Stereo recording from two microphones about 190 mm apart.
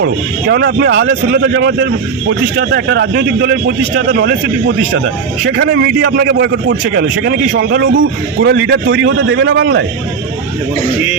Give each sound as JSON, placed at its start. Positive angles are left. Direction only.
{"t": 0.0, "sound": "a man's voice", "side_deg": -60}
{"t": 5.5, "sound": "a man's voice", "side_deg": -60}
{"t": 8.4, "sound": "a man's voice", "side_deg": -75}